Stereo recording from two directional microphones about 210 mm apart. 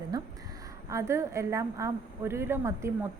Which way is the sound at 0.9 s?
15° right (ahead or behind).